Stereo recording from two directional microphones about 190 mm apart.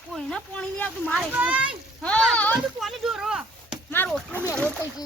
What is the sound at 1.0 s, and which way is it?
Speech, 10° right (ahead or behind).